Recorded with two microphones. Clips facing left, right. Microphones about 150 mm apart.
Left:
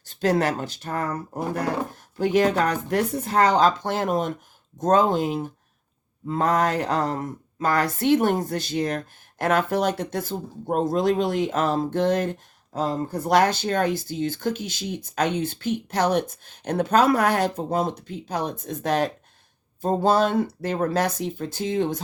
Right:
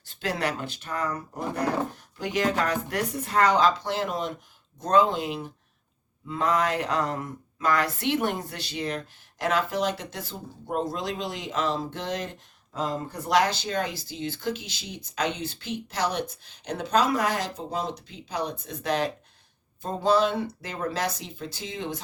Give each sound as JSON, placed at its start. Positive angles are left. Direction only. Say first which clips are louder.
{"t": 0.0, "sound": "speech", "louder": "left 7 dB", "side_deg": 40}